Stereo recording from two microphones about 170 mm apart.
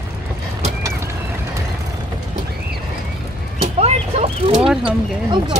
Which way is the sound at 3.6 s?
40° right (ahead or behind).